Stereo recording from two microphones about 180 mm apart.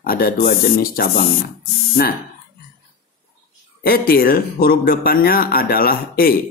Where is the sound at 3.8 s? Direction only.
55° left (ahead or behind).